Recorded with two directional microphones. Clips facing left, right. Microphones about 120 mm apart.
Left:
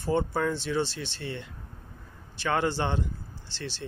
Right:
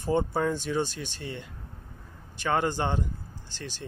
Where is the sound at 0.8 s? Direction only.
45° right (ahead or behind).